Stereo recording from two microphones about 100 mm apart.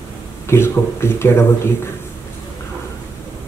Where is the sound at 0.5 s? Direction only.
25° left (ahead or behind).